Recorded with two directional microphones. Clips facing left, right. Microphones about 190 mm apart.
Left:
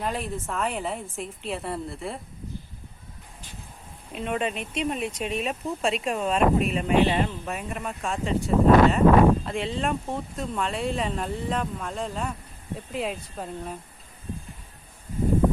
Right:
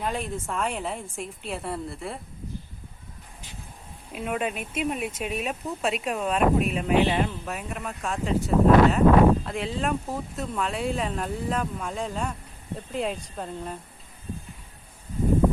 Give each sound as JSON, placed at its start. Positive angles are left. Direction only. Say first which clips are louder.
{"t": 0.0, "sound": "speech", "louder": "even", "side_deg": 0}
{"t": 4.1, "sound": "speech", "louder": "left 1 dB", "side_deg": -5}